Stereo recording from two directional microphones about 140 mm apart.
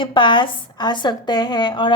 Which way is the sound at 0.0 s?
35° left (ahead or behind).